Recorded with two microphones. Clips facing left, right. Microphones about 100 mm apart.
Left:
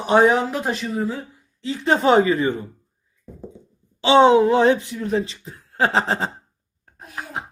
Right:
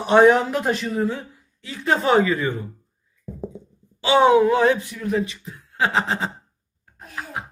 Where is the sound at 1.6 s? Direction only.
20° left (ahead or behind).